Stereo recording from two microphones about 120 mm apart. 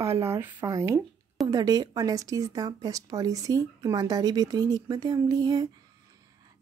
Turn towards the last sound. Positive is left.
turn(degrees=-35)  # may be behind; listen again after turning